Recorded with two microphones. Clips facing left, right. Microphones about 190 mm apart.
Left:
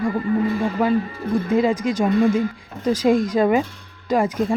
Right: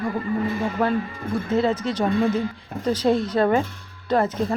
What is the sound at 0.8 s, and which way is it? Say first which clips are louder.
Speech: left 3 dB; 5° left (ahead or behind).